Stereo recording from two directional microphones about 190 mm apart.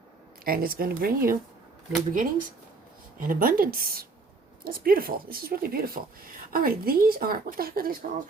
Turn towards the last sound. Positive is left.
turn(degrees=-50)  # may be behind; listen again after turning